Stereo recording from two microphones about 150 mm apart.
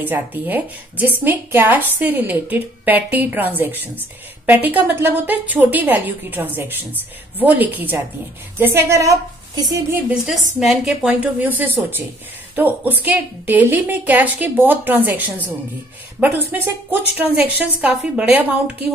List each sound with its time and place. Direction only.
0.0 s a woman's voice: 10° right (ahead or behind)
10.0 s a woman's voice: centre (ahead or behind)